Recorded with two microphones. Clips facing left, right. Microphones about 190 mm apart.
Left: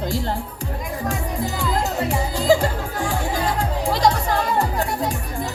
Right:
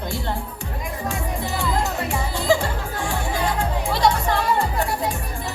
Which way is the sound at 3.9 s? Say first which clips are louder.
Left 1 dB; 40° left (ahead or behind).